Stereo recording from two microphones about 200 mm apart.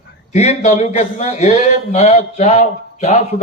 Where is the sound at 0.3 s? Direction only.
35° left (ahead or behind).